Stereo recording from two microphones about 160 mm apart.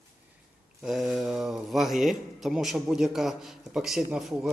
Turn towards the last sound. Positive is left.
turn(degrees=-5)  # may be behind; listen again after turning